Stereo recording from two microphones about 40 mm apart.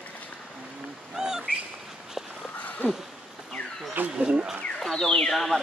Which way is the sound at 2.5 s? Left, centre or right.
Left.